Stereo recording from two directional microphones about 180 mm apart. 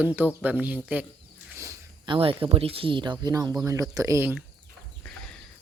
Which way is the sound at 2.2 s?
30° right (ahead or behind).